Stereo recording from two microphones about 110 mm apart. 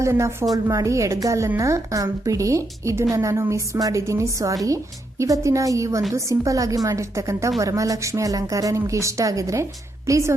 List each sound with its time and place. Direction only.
0.0 s a woman's voice: 25° right (ahead or behind)